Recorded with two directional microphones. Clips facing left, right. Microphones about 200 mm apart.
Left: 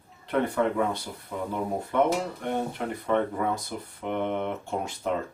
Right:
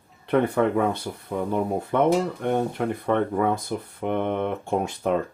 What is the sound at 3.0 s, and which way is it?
Speech, 55° right (ahead or behind).